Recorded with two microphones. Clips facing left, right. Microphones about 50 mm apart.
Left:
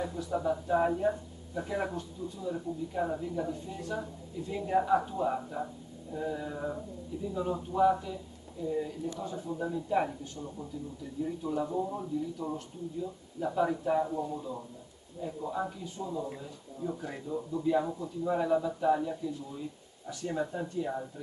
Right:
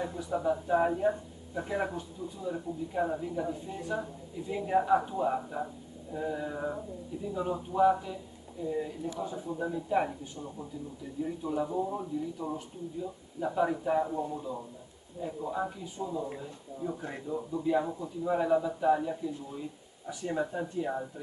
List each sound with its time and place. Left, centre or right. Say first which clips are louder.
0.0 s speech: right 1 dB; centre